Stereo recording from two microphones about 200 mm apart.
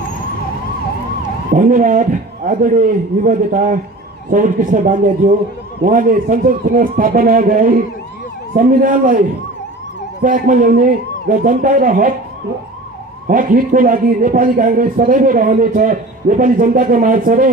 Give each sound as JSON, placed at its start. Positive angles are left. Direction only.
{"t": 1.5, "sound": "a man's voice", "side_deg": -40}
{"t": 10.2, "sound": "a man's voice", "side_deg": -45}
{"t": 13.3, "sound": "a man's voice", "side_deg": -45}